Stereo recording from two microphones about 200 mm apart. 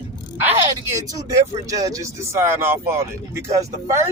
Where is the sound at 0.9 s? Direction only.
15° right (ahead or behind).